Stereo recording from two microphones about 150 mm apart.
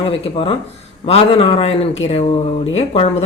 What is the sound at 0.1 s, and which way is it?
Speech, 40° left (ahead or behind).